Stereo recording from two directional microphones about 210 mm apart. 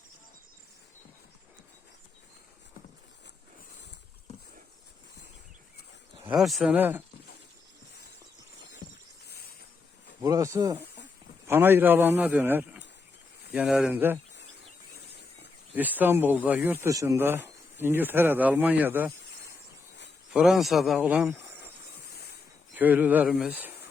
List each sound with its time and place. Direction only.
6.2 s speech: centre (ahead or behind)
10.2 s speech: 15° right (ahead or behind)
15.7 s speech: 10° right (ahead or behind)
20.3 s speech: centre (ahead or behind)
22.7 s speech: 10° right (ahead or behind)